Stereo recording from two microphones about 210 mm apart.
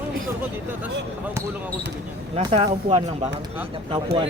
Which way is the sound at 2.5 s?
30° right (ahead or behind).